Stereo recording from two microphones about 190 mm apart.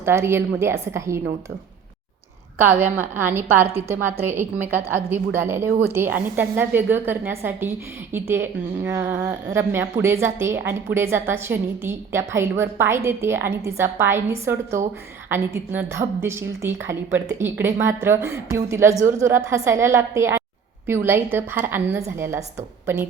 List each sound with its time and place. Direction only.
0.0 s a woman's voice: 15° right (ahead or behind)
2.6 s a woman's voice: 10° right (ahead or behind)